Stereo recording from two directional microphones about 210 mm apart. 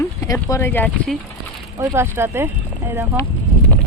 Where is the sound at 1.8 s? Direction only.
15° right (ahead or behind).